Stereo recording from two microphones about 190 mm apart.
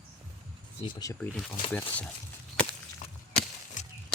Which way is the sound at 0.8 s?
20° left (ahead or behind).